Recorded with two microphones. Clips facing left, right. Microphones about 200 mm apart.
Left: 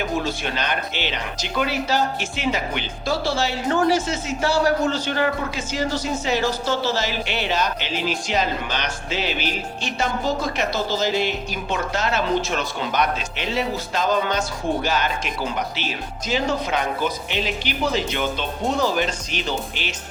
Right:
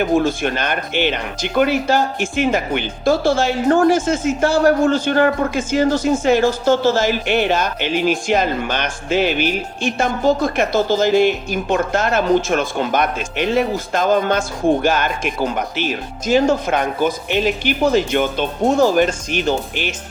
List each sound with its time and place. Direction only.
0.2 s speech: 50° right (ahead or behind)